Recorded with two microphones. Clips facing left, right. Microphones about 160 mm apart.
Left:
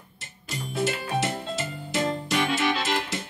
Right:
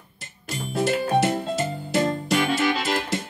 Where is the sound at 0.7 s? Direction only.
40° right (ahead or behind).